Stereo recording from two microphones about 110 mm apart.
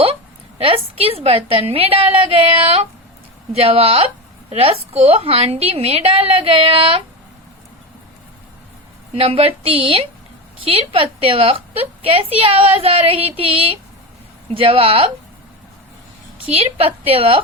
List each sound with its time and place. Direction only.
0.6 s a woman's voice: 55° right (ahead or behind)
9.1 s a woman's voice: 60° right (ahead or behind)
16.5 s a woman's voice: 60° right (ahead or behind)